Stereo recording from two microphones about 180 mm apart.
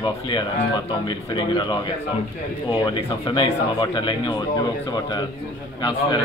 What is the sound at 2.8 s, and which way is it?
Speech, 25° left (ahead or behind).